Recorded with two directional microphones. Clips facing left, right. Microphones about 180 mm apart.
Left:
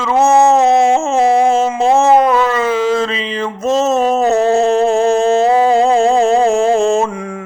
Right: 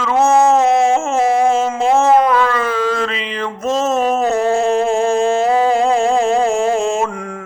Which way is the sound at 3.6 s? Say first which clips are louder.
Left 3 dB; 40° left (ahead or behind).